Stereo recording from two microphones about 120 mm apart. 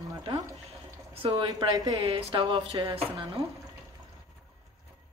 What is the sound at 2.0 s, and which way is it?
Speech, 45° right (ahead or behind).